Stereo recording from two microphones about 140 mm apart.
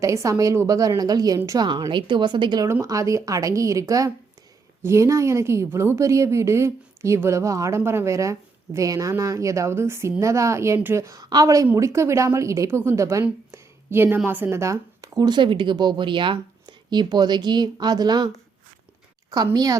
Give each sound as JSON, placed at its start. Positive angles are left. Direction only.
{"t": 0.0, "sound": "a woman's voice", "side_deg": -20}
{"t": 2.6, "sound": "a woman's voice", "side_deg": -20}
{"t": 13.2, "sound": "a sound", "side_deg": -15}
{"t": 14.3, "sound": "speech", "side_deg": -15}
{"t": 19.3, "sound": "a woman's voice", "side_deg": -25}